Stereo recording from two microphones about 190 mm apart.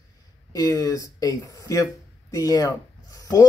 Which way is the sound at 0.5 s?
20° left (ahead or behind).